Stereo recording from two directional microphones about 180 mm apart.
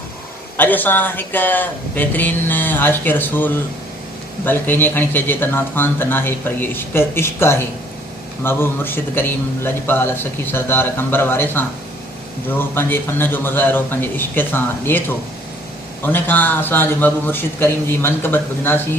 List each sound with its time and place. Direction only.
0.5 s a man's voice: 10° left (ahead or behind)
16.0 s a man's voice: 10° left (ahead or behind)